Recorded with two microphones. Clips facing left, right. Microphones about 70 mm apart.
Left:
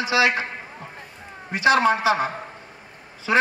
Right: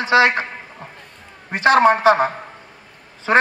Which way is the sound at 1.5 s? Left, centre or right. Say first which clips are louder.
Right 5 dB; right.